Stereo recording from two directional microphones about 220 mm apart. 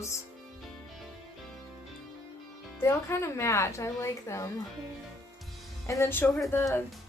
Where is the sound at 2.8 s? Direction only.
10° left (ahead or behind).